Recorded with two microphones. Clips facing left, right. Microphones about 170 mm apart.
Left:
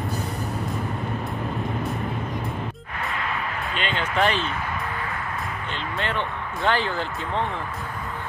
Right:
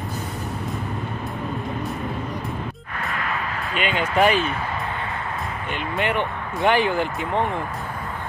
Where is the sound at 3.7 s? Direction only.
10° right (ahead or behind).